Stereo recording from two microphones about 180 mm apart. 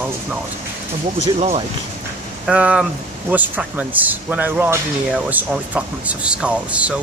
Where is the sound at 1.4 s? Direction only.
35° right (ahead or behind).